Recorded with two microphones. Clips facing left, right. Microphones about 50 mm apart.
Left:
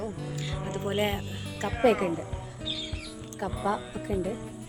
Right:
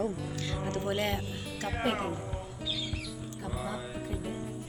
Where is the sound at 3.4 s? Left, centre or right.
Left.